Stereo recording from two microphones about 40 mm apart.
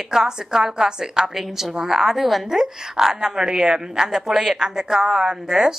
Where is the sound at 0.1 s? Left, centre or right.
Centre.